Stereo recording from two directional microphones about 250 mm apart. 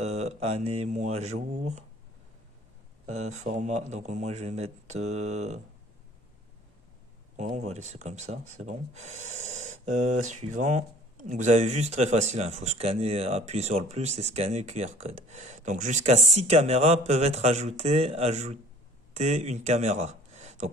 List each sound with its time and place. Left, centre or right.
0.2 s speech: right
3.2 s speech: right
7.3 s speech: right